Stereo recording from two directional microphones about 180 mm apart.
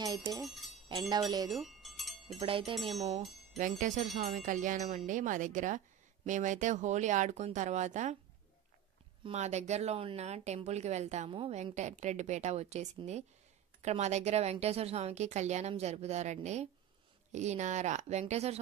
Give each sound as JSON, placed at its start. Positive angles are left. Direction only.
{"t": 0.0, "sound": "speech", "side_deg": -20}
{"t": 1.5, "sound": "bell", "side_deg": 0}
{"t": 2.3, "sound": "speech", "side_deg": -30}
{"t": 3.5, "sound": "wind chime", "side_deg": -45}
{"t": 9.2, "sound": "speech", "side_deg": -40}